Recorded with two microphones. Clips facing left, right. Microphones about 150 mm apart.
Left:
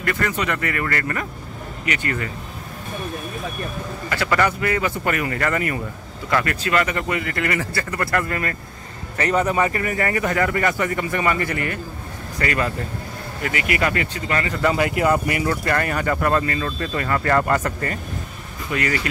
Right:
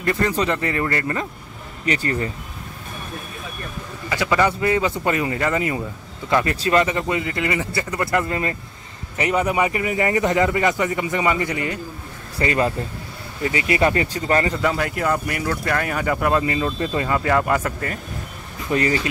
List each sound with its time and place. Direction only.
0.0 s speech: 25° right (ahead or behind)
4.1 s speech: 15° right (ahead or behind)
6.3 s speech: 30° right (ahead or behind)
14.6 s speech: 5° left (ahead or behind)
18.7 s speech: 30° right (ahead or behind)